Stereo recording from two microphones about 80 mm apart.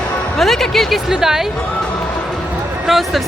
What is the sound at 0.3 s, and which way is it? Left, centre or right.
Speech, centre.